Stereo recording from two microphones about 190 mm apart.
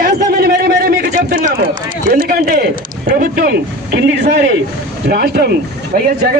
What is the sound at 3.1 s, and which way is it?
A man's voice, 55° right (ahead or behind).